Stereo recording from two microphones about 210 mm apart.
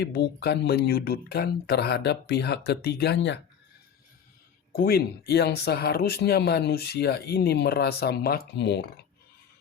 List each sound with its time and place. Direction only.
0.0 s speech: 50° left (ahead or behind)
4.7 s speech: 45° left (ahead or behind)